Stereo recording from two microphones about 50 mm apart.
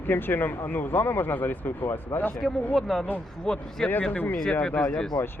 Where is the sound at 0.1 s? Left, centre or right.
Left.